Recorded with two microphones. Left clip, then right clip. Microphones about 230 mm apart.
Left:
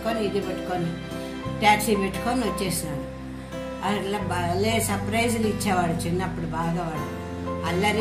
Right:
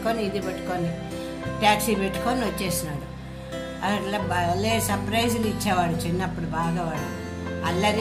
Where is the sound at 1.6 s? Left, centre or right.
Centre.